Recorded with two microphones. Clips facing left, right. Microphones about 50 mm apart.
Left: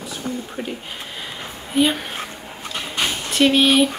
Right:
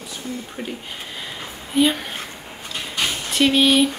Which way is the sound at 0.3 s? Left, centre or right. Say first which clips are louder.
Left 3 dB; left.